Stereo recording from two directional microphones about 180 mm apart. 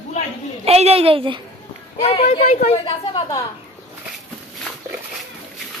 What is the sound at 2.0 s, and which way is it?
Speech, 35° left (ahead or behind).